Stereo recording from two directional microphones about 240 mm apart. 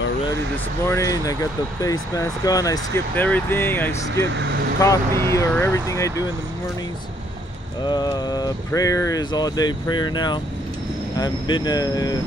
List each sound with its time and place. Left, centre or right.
0.8 s speech: centre
4.4 s speech: right
4.7 s speech: centre
7.8 s speech: centre